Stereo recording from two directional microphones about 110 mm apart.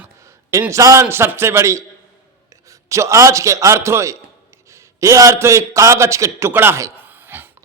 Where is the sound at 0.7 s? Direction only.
30° right (ahead or behind).